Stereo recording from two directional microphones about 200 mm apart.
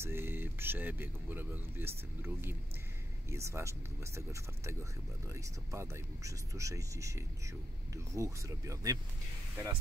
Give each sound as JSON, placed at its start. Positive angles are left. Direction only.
{"t": 0.0, "sound": "speech", "side_deg": -10}